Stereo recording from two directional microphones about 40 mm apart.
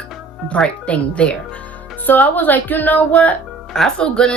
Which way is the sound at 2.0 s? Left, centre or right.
Left.